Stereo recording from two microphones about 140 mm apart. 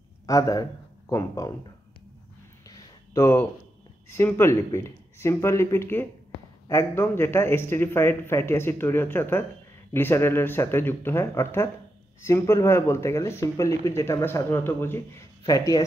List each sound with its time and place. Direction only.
0.3 s speech: 25° left (ahead or behind)
3.2 s speech: 20° left (ahead or behind)